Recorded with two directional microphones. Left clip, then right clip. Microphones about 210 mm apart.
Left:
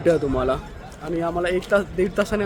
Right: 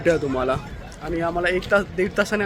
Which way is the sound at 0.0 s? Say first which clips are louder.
Left 1 dB; 5° left (ahead or behind).